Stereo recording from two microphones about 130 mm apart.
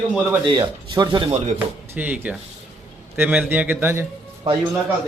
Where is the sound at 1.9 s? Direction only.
10° right (ahead or behind).